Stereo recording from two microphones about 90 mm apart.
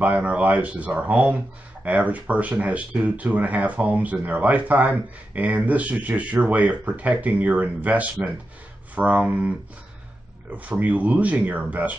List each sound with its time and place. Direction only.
0.0 s speech: 15° right (ahead or behind)
10.5 s speech: 15° right (ahead or behind)